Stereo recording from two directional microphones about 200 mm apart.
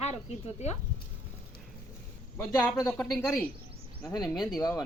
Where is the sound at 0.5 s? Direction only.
35° left (ahead or behind).